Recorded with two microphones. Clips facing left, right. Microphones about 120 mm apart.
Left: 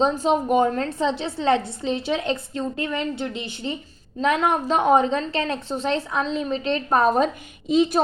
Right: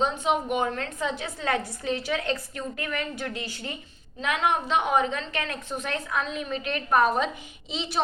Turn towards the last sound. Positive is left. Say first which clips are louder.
# left 14 dB
turn(degrees=45)  # may be behind; listen again after turning